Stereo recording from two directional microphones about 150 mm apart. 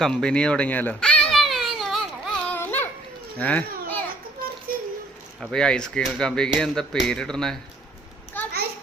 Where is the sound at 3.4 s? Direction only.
10° left (ahead or behind).